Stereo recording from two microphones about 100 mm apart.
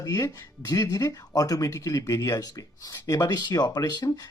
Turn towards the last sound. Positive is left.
turn(degrees=45)  # may be behind; listen again after turning